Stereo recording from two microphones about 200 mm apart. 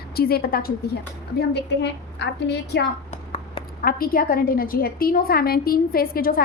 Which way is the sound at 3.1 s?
30° left (ahead or behind).